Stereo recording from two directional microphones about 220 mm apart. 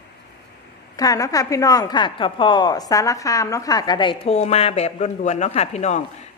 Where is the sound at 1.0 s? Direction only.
15° left (ahead or behind).